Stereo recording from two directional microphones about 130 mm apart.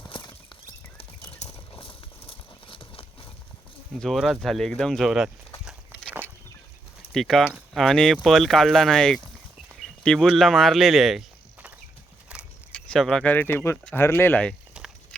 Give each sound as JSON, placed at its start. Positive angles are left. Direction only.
{"t": 0.1, "sound": "horse", "side_deg": 35}
{"t": 1.3, "sound": "bird flight", "side_deg": 50}
{"t": 1.7, "sound": "horse", "side_deg": 45}
{"t": 4.0, "sound": "speech", "side_deg": 0}
{"t": 5.6, "sound": "a sound", "side_deg": -10}
{"t": 7.1, "sound": "speech", "side_deg": 0}
{"t": 12.3, "sound": "a sound", "side_deg": -10}
{"t": 12.9, "sound": "speech", "side_deg": 5}
{"t": 14.8, "sound": "a sound", "side_deg": -5}